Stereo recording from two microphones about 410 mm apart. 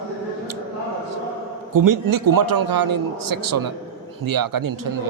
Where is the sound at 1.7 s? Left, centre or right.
Right.